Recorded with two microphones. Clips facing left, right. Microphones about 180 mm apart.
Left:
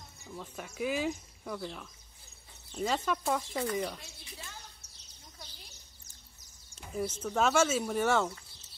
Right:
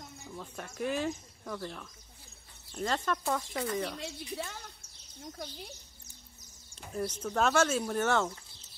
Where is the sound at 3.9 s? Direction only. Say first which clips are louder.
Right 12 dB; 70° right (ahead or behind).